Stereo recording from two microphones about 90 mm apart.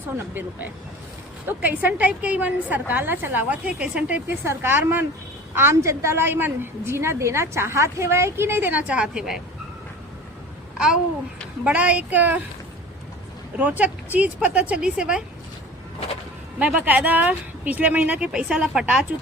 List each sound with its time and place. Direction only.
1.5 s a woman's voice: 20° right (ahead or behind)
4.4 s a woman's voice: 25° right (ahead or behind); by 9.4 s 5° right (ahead or behind)
10.8 s babbling: 10° right (ahead or behind)
11.6 s speech: 15° right (ahead or behind)
13.6 s speech: 15° right (ahead or behind)
16.6 s speech: 15° right (ahead or behind)